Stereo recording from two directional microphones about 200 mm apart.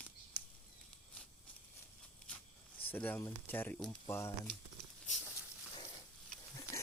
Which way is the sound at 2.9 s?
10° left (ahead or behind).